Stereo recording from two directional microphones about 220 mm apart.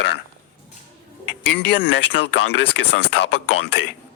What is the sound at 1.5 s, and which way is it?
Speech, 50° left (ahead or behind).